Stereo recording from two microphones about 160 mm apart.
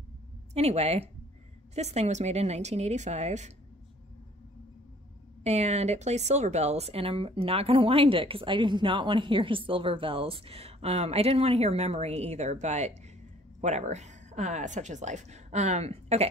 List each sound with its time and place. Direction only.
0.6 s a woman's voice: 40° right (ahead or behind)
5.4 s a woman's voice: 45° right (ahead or behind)